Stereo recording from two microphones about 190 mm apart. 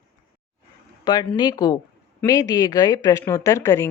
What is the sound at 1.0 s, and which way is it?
Speech, 25° left (ahead or behind).